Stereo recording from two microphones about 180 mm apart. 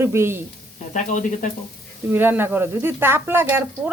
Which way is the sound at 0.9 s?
45° left (ahead or behind).